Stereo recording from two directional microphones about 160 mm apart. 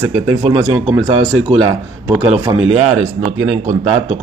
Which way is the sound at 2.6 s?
40° right (ahead or behind).